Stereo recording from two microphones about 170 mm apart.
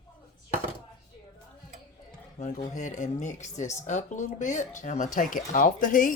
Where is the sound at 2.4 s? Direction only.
45° left (ahead or behind).